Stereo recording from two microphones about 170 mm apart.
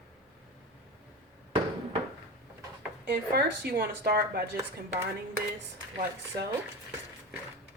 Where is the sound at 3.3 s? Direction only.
70° right (ahead or behind).